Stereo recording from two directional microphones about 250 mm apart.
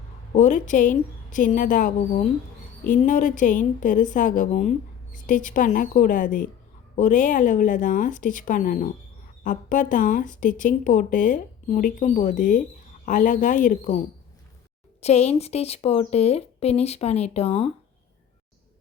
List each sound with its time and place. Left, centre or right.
0.3 s speech: left
15.0 s speech: left